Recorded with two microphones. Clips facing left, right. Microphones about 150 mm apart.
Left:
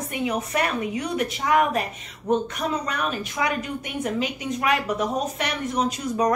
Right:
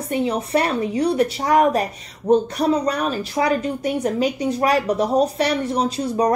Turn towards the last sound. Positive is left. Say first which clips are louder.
# right 3 dB
turn(degrees=-30)  # may be behind; listen again after turning